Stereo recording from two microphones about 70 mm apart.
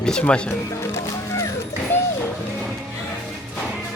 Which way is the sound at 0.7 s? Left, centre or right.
Left.